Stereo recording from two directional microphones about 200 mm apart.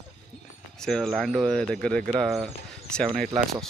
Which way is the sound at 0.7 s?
5° left (ahead or behind).